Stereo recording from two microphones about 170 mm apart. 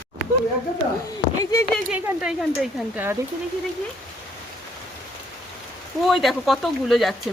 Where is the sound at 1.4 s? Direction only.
20° left (ahead or behind).